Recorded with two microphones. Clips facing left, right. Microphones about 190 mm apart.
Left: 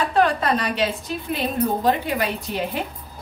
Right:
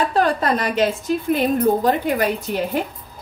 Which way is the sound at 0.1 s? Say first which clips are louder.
Right 1 dB; 40° right (ahead or behind).